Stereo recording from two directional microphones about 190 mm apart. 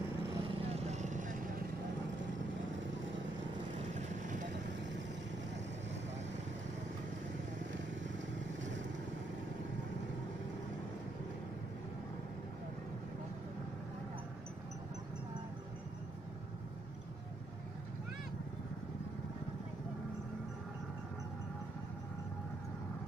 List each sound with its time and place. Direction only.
0.3 s vehicle: 30° right (ahead or behind)
3.9 s vehicle: 40° right (ahead or behind)
4.5 s vehicle: 70° right (ahead or behind)